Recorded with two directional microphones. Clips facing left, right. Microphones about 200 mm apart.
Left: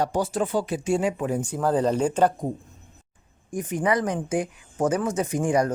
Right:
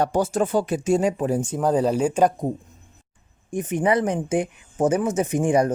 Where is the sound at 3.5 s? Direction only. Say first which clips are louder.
Right 3 dB; 25° right (ahead or behind).